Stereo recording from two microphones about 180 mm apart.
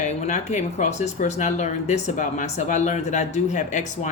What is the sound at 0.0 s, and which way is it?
Speech, 40° left (ahead or behind).